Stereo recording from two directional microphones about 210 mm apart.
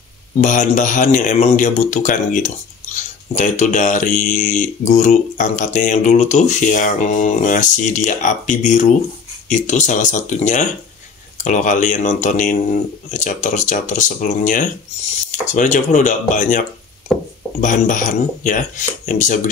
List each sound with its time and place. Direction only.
0.4 s speech: 35° left (ahead or behind)
17.1 s a sound: centre (ahead or behind)
17.6 s speech: 40° left (ahead or behind)